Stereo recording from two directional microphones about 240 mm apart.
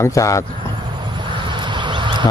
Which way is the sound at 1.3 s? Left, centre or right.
Centre.